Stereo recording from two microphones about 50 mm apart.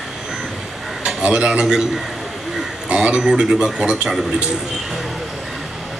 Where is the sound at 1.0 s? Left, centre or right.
Right.